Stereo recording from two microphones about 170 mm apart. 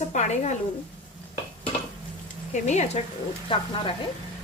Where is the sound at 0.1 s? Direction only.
45° left (ahead or behind).